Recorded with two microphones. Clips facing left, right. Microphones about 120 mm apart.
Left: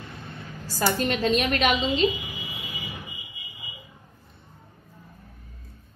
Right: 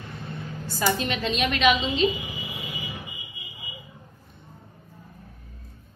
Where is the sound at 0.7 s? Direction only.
40° left (ahead or behind).